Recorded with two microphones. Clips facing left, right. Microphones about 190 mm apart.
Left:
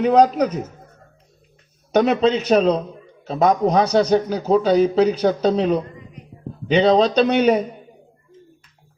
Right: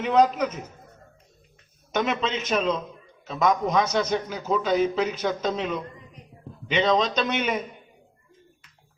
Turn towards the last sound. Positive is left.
turn(degrees=35)  # may be behind; listen again after turning